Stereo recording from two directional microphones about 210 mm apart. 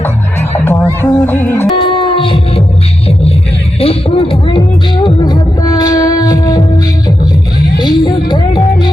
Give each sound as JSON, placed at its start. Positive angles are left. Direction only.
{"t": 0.6, "sound": "music", "side_deg": 10}
{"t": 1.7, "sound": "music", "side_deg": 25}
{"t": 3.8, "sound": "speech", "side_deg": 25}
{"t": 5.0, "sound": "music", "side_deg": 20}
{"t": 7.8, "sound": "speech", "side_deg": 20}